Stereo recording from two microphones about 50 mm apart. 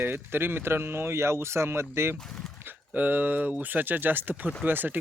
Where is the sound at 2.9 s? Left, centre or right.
Right.